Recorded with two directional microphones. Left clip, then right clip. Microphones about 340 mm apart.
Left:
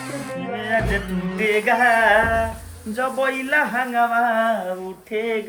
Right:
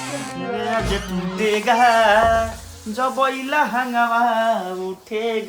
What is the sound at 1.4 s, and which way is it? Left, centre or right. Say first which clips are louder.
Speech: right 1 dB; centre.